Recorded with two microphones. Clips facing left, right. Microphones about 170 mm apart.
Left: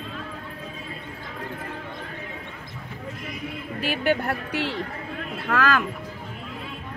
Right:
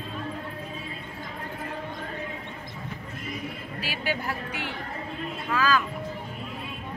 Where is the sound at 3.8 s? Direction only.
55° left (ahead or behind).